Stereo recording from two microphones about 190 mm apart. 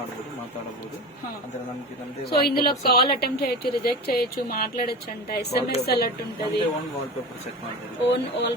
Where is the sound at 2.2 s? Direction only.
55° left (ahead or behind).